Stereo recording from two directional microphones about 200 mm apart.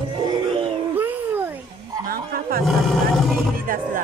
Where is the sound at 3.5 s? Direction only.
45° right (ahead or behind).